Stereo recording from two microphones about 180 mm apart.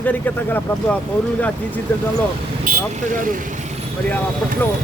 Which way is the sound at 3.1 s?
50° right (ahead or behind).